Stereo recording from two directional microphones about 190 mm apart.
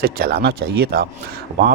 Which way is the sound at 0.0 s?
55° right (ahead or behind).